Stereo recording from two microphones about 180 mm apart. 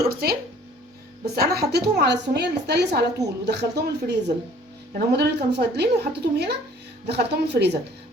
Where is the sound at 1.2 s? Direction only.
65° right (ahead or behind).